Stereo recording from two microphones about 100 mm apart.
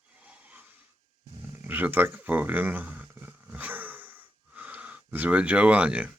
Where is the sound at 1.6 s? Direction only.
20° right (ahead or behind).